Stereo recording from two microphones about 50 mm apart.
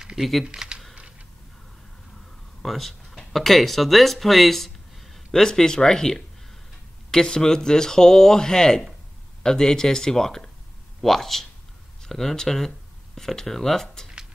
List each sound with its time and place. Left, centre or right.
0.0 s typing: centre
0.5 s computer keyboard: centre
2.6 s speech: centre